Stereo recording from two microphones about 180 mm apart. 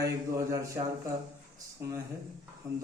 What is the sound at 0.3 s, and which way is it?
A man's voice, 20° right (ahead or behind).